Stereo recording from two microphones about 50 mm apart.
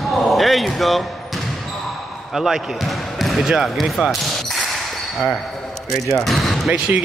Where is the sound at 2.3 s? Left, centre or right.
Centre.